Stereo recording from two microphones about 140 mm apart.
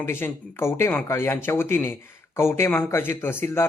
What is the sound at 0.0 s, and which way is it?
Speech, 15° left (ahead or behind).